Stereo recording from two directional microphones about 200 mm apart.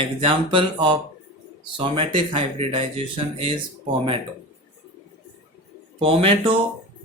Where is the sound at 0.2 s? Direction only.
25° right (ahead or behind).